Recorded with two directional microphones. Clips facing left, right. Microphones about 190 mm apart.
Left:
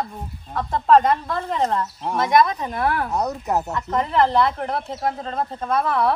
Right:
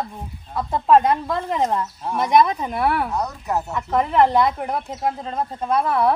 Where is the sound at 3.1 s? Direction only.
20° left (ahead or behind).